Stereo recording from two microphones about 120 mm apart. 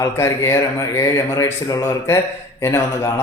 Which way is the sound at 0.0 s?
25° left (ahead or behind).